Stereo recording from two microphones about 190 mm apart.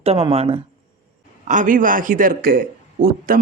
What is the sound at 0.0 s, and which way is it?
Speech, 30° right (ahead or behind).